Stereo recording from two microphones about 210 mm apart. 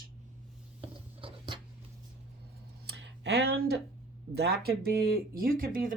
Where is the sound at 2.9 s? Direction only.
55° right (ahead or behind).